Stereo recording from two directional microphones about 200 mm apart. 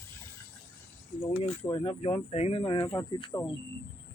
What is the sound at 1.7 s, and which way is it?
Speech, 25° left (ahead or behind).